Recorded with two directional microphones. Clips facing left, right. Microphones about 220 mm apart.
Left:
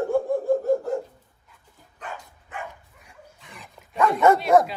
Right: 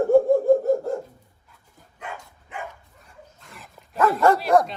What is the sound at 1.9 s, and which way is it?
Dog, 10° right (ahead or behind).